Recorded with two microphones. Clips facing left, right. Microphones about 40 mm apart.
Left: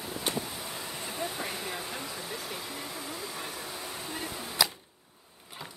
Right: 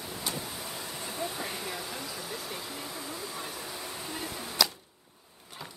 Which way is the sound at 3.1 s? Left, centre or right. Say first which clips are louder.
Even; left.